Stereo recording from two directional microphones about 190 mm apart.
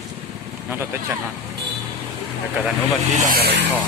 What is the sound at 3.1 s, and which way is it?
Speech, 50° right (ahead or behind).